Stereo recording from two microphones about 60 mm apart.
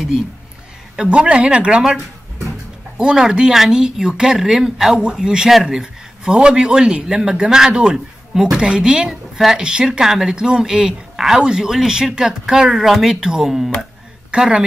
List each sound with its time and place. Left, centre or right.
0.9 s speech: centre
3.0 s a woman's voice: centre